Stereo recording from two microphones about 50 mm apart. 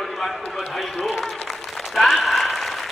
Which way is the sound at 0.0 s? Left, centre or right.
Centre.